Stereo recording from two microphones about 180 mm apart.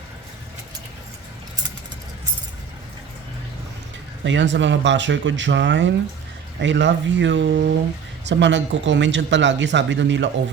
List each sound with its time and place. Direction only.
4.2 s speech: 90° right